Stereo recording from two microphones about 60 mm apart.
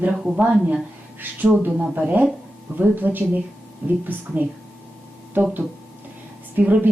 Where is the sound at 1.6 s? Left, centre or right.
Right.